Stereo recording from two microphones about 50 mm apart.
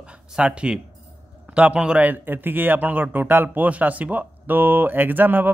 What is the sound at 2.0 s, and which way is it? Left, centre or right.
Speech, right.